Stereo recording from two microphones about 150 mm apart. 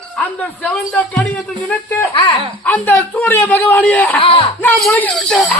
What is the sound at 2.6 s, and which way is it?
Speech, 10° left (ahead or behind).